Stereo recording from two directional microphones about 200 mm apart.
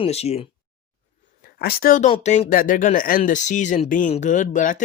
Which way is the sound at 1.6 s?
50° left (ahead or behind).